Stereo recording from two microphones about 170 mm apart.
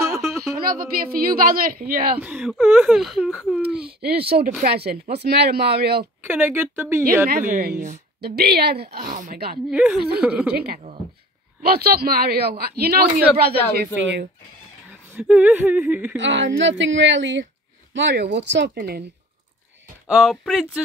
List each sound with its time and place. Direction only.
0.7 s a man's voice: 55° right (ahead or behind)
2.1 s speech: 10° right (ahead or behind)
3.6 s speech: 70° right (ahead or behind)
6.2 s speech: 15° right (ahead or behind)
7.2 s a man's voice: 55° right (ahead or behind)
8.2 s speech: 70° right (ahead or behind)
8.9 s a man's voice: 50° right (ahead or behind)
9.7 s speech: 5° right (ahead or behind)
10.5 s a man's voice: 70° right (ahead or behind)
15.0 s speech: 10° right (ahead or behind)
16.2 s a woman's voice: 90° right; by 19.0 s 70° right (ahead or behind)
20.1 s speech: 5° right (ahead or behind)